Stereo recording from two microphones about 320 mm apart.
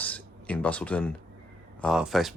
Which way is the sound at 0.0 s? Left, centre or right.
Centre.